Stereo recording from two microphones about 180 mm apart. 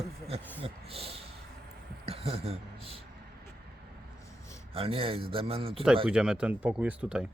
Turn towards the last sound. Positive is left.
turn(degrees=-5)  # may be behind; listen again after turning